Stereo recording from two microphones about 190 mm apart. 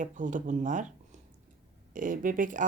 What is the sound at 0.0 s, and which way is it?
Speech, 40° right (ahead or behind).